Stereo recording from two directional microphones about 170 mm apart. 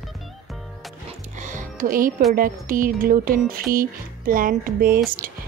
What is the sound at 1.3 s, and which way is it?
Music, 50° right (ahead or behind).